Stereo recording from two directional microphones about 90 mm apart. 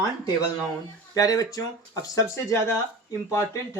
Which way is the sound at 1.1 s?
40° left (ahead or behind).